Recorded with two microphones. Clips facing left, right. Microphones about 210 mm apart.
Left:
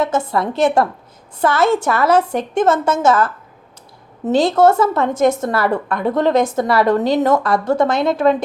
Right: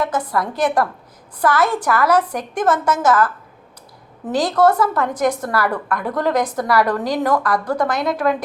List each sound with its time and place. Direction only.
0.0 s a woman's voice: 25° left (ahead or behind)